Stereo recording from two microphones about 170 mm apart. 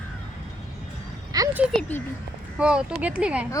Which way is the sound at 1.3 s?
20° right (ahead or behind).